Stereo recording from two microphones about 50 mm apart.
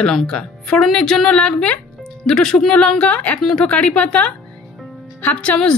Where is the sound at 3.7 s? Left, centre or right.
Left.